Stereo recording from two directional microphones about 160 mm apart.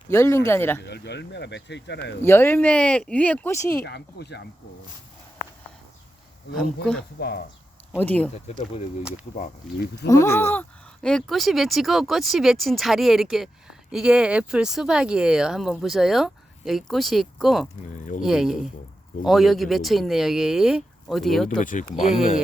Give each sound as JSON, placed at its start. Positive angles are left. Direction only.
{"t": 0.1, "sound": "speech", "side_deg": 20}
{"t": 0.9, "sound": "speech", "side_deg": 90}
{"t": 2.2, "sound": "speech", "side_deg": 15}
{"t": 3.8, "sound": "speech", "side_deg": 90}
{"t": 6.6, "sound": "speech", "side_deg": 5}
{"t": 7.2, "sound": "speech", "side_deg": 75}
{"t": 7.9, "sound": "speech", "side_deg": 10}
{"t": 8.5, "sound": "speech", "side_deg": 40}
{"t": 9.4, "sound": "speech", "side_deg": 70}
{"t": 10.1, "sound": "speech", "side_deg": 20}
{"t": 17.9, "sound": "speech", "side_deg": 50}
{"t": 18.2, "sound": "speech", "side_deg": -5}
{"t": 21.6, "sound": "speech", "side_deg": 55}